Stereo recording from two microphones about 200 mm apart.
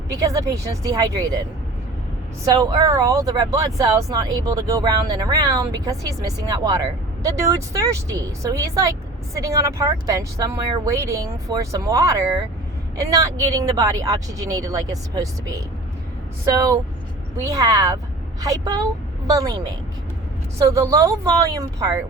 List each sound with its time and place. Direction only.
0.2 s speech: 15° right (ahead or behind)
2.4 s speech: 20° right (ahead or behind)